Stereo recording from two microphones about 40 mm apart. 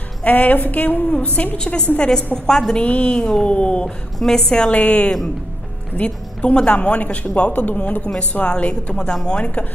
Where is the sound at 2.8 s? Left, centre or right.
Left.